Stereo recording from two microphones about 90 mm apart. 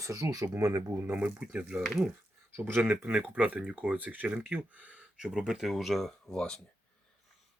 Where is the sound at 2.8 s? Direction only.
15° right (ahead or behind); by 6.6 s 10° left (ahead or behind).